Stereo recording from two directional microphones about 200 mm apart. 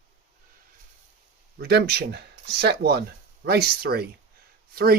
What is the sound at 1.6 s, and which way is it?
Speech, 55° right (ahead or behind).